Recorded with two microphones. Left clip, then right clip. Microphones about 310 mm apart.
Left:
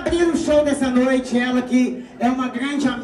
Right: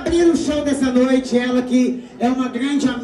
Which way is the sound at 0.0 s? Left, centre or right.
Centre.